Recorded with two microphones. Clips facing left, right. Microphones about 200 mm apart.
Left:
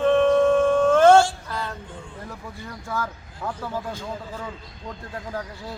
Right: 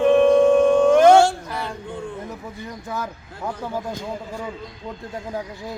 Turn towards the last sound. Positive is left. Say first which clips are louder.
# right 3 dB
turn(degrees=-20)  # may be behind; listen again after turning